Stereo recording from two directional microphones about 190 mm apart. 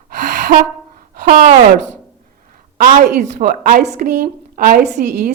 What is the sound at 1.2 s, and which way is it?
A woman's voice, 45° right (ahead or behind).